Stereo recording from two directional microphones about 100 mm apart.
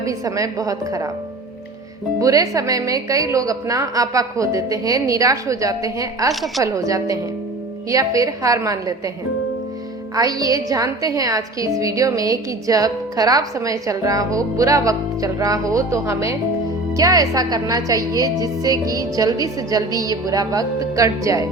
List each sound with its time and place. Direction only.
0.0 s a woman's voice: 35° right (ahead or behind)
2.1 s a woman's voice: 35° right (ahead or behind)
10.2 s a woman's voice: 35° right (ahead or behind)